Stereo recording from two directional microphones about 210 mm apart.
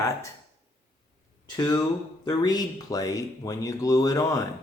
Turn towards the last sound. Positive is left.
turn(degrees=15)  # may be behind; listen again after turning